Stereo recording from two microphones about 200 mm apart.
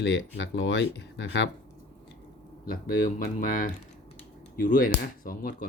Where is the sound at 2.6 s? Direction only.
45° left (ahead or behind).